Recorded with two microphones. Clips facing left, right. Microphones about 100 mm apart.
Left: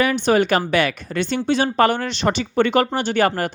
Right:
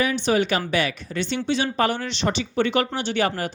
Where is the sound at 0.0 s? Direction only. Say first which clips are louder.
Left 4 dB; 55° left (ahead or behind).